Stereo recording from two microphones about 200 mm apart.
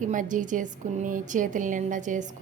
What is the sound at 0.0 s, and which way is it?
A woman's voice, 40° right (ahead or behind).